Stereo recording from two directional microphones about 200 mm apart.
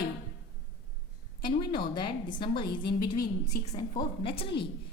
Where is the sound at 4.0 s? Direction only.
25° left (ahead or behind).